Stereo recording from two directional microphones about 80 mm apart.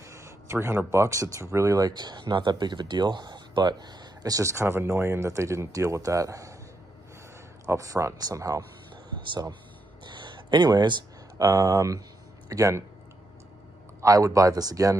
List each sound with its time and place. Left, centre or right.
0.0 s speech: right
2.0 s speech: right
7.6 s speech: right
9.3 s speech: right
10.0 s a sound: right
11.3 s speech: right
14.0 s speech: right